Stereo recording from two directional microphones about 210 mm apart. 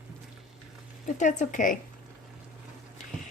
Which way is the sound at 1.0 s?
35° left (ahead or behind).